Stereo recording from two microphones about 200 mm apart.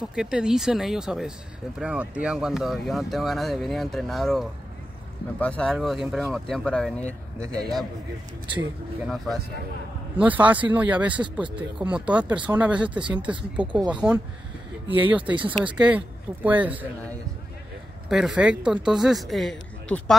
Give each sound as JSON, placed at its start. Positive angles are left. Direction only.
{"t": 0.1, "sound": "speech", "side_deg": -5}
{"t": 8.5, "sound": "speech", "side_deg": -5}
{"t": 15.3, "sound": "speech", "side_deg": -25}
{"t": 15.6, "sound": "speech", "side_deg": -5}
{"t": 18.0, "sound": "speech", "side_deg": 0}